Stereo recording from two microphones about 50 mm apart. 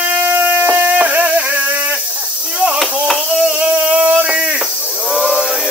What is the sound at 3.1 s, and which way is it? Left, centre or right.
Hands, centre.